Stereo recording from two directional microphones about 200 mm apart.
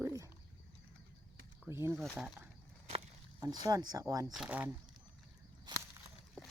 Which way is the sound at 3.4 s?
20° right (ahead or behind).